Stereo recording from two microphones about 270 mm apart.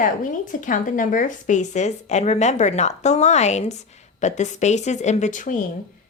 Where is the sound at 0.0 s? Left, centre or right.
Left.